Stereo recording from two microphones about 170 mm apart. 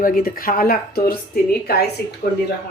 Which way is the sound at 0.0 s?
55° left (ahead or behind).